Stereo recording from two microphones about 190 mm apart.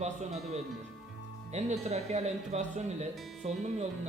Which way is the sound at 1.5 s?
35° right (ahead or behind).